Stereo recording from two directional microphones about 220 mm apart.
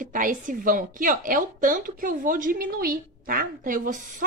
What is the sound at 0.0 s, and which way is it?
A woman's voice, 35° right (ahead or behind).